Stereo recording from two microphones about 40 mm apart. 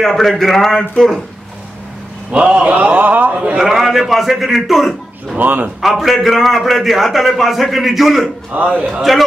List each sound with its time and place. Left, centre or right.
0.0 s speech: centre
2.3 s a man's voice: right
2.7 s speech: right
3.5 s a man's voice: centre
5.4 s speech: right
5.8 s a man's voice: centre
8.5 s speech: right
9.1 s a man's voice: centre